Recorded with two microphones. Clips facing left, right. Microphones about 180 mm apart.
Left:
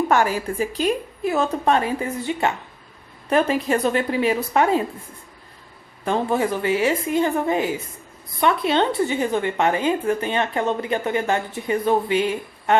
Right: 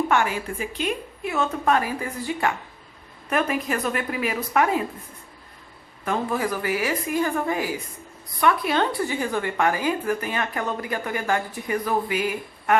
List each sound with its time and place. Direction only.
0.1 s a woman's voice: 40° left (ahead or behind)
6.1 s a woman's voice: 25° left (ahead or behind)